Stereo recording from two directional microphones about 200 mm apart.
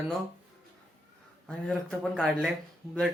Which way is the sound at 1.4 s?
5° left (ahead or behind).